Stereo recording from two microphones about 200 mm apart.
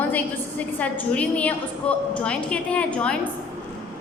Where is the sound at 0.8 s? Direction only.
5° left (ahead or behind).